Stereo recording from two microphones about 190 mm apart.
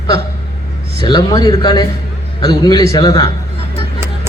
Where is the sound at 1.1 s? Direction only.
20° left (ahead or behind).